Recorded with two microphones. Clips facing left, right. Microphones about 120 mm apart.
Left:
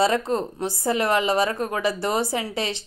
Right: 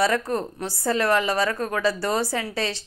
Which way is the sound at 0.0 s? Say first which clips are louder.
Left 1 dB; 20° left (ahead or behind).